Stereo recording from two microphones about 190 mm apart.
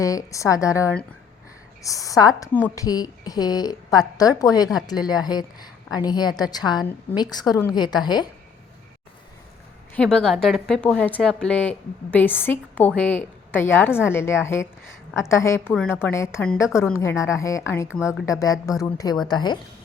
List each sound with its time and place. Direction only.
0.0 s a woman's voice: 15° left (ahead or behind)
9.9 s a woman's voice: 5° left (ahead or behind); by 19.5 s 20° left (ahead or behind)